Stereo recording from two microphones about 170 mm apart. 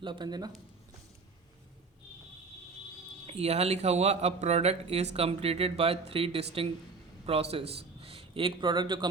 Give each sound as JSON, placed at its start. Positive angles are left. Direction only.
{"t": 0.0, "sound": "speech", "side_deg": -30}
{"t": 3.2, "sound": "a man's voice", "side_deg": -40}